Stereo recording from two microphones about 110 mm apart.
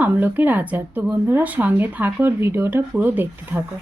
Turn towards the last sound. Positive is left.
turn(degrees=-15)  # may be behind; listen again after turning